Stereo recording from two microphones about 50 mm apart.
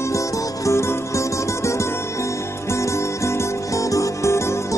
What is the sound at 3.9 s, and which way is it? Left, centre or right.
Music, left.